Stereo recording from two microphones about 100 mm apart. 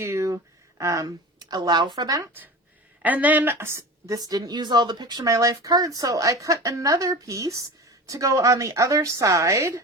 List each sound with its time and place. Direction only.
0.0 s a sound: 30° right (ahead or behind)
0.8 s a woman's voice: 35° right (ahead or behind)
3.0 s a woman's voice: 15° right (ahead or behind); by 5.3 s 45° right (ahead or behind)
5.3 s a woman's voice: 35° right (ahead or behind)